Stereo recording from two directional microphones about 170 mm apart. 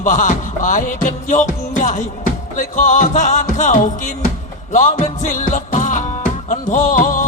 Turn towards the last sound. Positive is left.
turn(degrees=50)  # may be behind; listen again after turning